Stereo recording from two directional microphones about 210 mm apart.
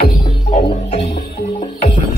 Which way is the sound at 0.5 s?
30° left (ahead or behind).